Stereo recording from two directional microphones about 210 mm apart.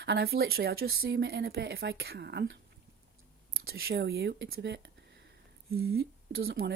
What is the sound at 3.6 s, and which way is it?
Speech, 50° right (ahead or behind).